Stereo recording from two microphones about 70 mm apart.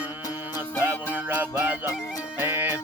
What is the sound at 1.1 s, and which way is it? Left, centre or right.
Music, right.